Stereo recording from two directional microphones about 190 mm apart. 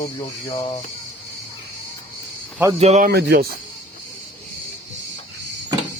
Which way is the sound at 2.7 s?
35° right (ahead or behind).